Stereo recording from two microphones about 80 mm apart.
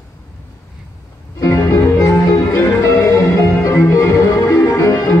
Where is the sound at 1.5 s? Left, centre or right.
Left.